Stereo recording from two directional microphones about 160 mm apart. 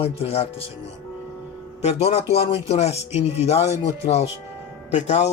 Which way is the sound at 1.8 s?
40° left (ahead or behind).